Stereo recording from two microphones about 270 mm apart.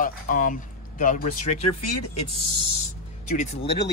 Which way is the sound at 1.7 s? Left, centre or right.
Left.